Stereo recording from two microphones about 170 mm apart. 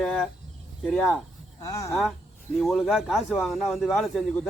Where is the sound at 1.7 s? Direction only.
20° left (ahead or behind).